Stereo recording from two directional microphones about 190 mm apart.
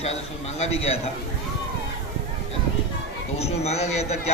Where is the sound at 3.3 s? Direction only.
35° left (ahead or behind).